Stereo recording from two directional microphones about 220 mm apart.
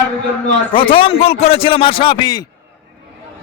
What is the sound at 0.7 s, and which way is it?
A man's voice, 25° left (ahead or behind).